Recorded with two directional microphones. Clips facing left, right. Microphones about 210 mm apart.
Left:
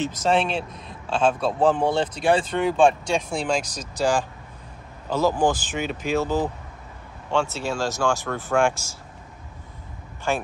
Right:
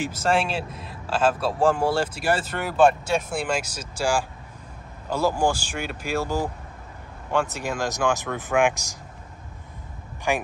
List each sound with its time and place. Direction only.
0.0 s speech: 10° right (ahead or behind)
10.3 s speech: 15° right (ahead or behind)